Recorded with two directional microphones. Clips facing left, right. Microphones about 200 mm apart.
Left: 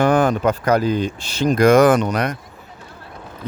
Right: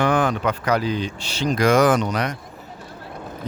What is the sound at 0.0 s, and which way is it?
Speech, 45° left (ahead or behind).